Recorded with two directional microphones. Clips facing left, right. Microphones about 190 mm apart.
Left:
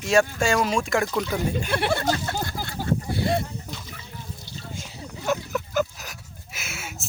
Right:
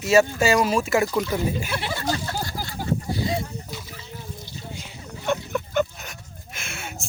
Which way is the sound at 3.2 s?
60° left (ahead or behind).